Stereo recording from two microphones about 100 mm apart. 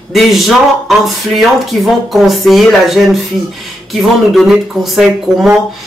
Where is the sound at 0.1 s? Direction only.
Centre (ahead or behind).